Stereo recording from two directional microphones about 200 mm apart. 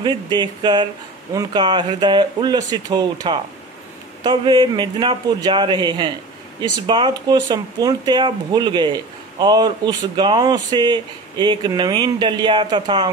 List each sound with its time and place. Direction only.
0.0 s speech: 20° right (ahead or behind)